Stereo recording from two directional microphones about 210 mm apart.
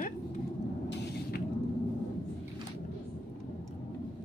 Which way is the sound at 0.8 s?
55° left (ahead or behind).